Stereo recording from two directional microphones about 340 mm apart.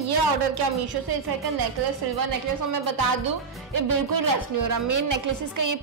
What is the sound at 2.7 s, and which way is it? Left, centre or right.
Speech, right.